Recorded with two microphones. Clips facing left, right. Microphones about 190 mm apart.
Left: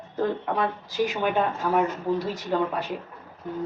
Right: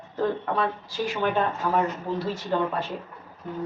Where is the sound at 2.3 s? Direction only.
15° left (ahead or behind).